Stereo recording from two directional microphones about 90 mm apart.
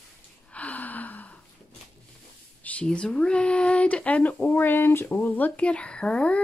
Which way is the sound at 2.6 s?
15° left (ahead or behind).